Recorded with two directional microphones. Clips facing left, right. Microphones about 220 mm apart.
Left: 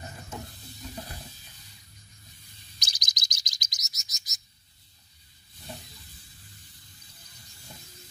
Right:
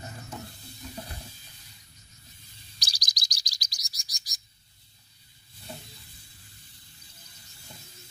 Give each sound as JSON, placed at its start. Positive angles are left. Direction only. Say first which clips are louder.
{"t": 2.8, "sound": "bird", "louder": "even", "side_deg": 20}